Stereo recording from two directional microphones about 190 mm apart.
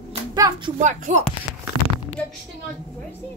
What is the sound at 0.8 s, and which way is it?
Speech, 40° right (ahead or behind).